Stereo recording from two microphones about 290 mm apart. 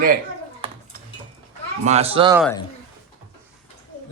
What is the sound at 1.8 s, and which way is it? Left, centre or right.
Speech, right.